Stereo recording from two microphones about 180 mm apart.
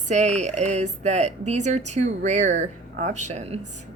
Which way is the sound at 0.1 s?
40° right (ahead or behind).